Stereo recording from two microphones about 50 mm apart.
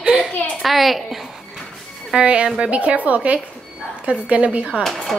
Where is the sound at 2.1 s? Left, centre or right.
Centre.